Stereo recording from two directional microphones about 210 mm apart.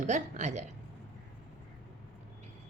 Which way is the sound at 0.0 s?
35° right (ahead or behind).